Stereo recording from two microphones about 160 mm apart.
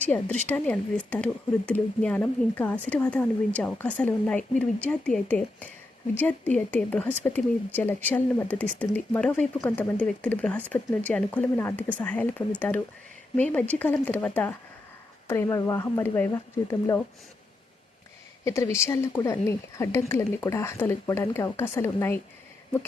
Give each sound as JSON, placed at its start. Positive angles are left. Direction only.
{"t": 0.0, "sound": "speech", "side_deg": 10}
{"t": 18.4, "sound": "speech", "side_deg": 20}